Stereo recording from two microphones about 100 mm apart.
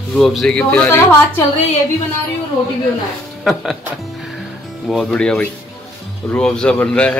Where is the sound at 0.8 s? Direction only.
25° left (ahead or behind).